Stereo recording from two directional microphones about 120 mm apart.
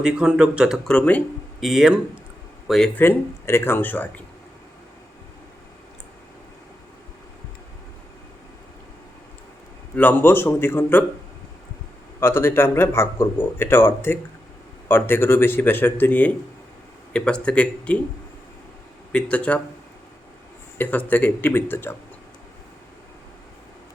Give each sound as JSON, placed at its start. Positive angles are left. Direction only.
{"t": 0.0, "sound": "speech", "side_deg": -5}
{"t": 0.9, "sound": "speech", "side_deg": 10}
{"t": 1.6, "sound": "speech", "side_deg": -5}
{"t": 2.9, "sound": "speech", "side_deg": 15}
{"t": 9.9, "sound": "speech", "side_deg": 15}
{"t": 12.2, "sound": "speech", "side_deg": 20}
{"t": 19.1, "sound": "speech", "side_deg": 10}
{"t": 20.7, "sound": "speech", "side_deg": 15}